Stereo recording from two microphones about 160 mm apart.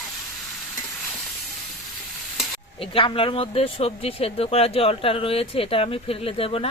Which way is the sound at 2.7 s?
35° left (ahead or behind).